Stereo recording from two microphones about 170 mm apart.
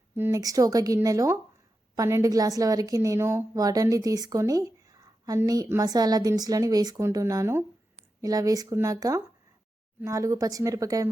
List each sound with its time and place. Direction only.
0.2 s a woman's voice: 20° right (ahead or behind)